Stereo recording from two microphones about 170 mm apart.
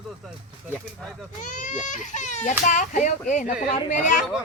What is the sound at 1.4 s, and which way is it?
Speech, 50° left (ahead or behind).